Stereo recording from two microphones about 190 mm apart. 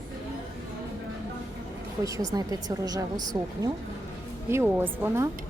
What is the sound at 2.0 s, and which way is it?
A woman's voice, 15° right (ahead or behind).